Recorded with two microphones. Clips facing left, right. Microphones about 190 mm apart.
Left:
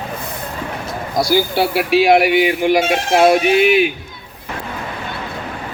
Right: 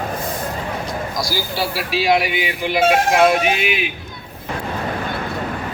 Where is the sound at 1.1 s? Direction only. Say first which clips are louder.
Left 12 dB; 60° left (ahead or behind).